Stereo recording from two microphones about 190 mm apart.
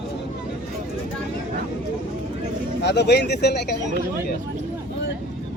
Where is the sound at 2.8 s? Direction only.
65° left (ahead or behind).